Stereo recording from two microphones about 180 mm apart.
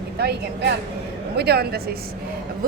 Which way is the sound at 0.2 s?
65° right (ahead or behind).